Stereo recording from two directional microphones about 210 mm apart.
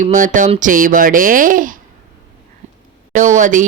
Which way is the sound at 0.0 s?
35° right (ahead or behind).